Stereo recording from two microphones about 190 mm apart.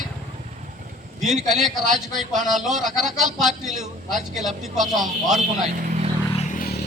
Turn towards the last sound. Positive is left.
turn(degrees=50)  # may be behind; listen again after turning